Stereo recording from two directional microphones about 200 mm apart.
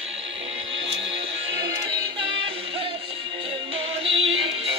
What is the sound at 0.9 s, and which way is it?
Music, 70° right (ahead or behind).